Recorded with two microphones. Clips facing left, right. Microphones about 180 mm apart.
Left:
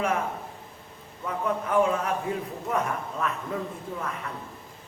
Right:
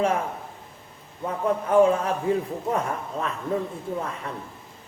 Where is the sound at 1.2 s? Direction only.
30° right (ahead or behind).